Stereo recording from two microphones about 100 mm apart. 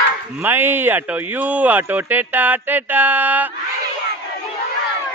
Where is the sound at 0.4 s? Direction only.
20° right (ahead or behind).